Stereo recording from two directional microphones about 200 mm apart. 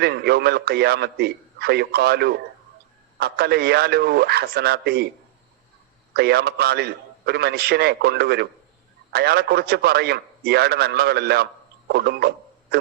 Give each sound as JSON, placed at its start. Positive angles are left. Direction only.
{"t": 0.0, "sound": "a man's voice", "side_deg": -55}
{"t": 6.1, "sound": "a man's voice", "side_deg": -55}